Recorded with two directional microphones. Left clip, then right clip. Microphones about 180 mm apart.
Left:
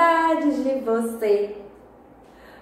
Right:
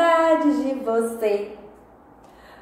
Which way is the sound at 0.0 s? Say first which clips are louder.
Right 1 dB; 15° right (ahead or behind).